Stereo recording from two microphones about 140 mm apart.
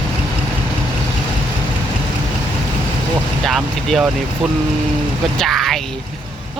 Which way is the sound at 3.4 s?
Centre (ahead or behind).